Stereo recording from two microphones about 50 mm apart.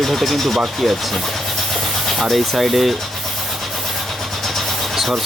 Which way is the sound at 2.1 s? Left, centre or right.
Centre.